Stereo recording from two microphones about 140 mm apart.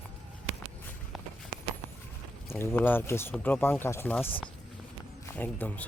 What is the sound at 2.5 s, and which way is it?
Speech, 15° left (ahead or behind).